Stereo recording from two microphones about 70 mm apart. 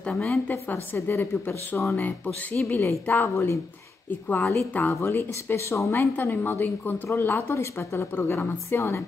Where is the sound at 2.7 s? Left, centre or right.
Left.